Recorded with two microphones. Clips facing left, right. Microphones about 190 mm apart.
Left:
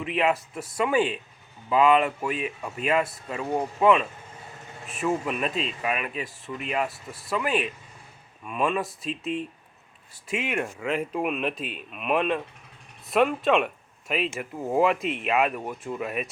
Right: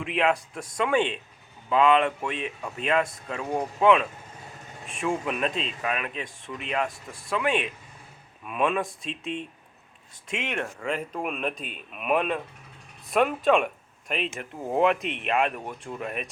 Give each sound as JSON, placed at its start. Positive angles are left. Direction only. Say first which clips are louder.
{"t": 0.0, "sound": "speech", "louder": "even", "side_deg": 0}